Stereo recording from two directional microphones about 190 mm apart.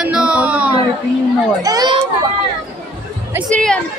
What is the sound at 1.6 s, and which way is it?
Children playing, 20° right (ahead or behind).